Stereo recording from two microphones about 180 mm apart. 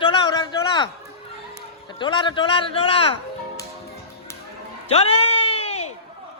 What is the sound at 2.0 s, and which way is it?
A man's voice, 25° left (ahead or behind).